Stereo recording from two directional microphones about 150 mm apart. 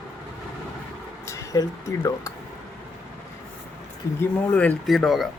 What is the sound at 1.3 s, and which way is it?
Speech, 20° left (ahead or behind).